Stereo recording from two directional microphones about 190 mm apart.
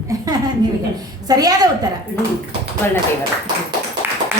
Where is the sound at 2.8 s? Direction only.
10° left (ahead or behind).